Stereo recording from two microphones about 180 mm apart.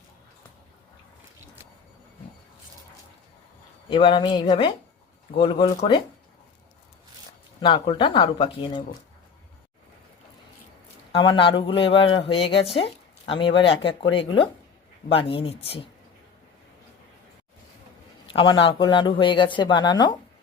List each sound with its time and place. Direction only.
3.8 s speech: 30° left (ahead or behind)
7.6 s speech: 30° left (ahead or behind)
11.2 s speech: 30° left (ahead or behind)
18.3 s speech: 25° left (ahead or behind)